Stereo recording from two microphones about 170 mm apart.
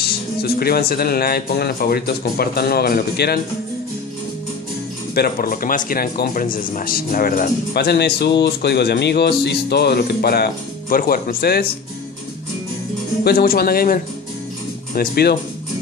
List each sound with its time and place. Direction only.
0.0 s speech: 65° left (ahead or behind)
5.1 s speech: 60° left (ahead or behind)
13.2 s speech: 60° left (ahead or behind)